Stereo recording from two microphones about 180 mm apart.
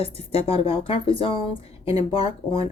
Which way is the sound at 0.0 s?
35° left (ahead or behind).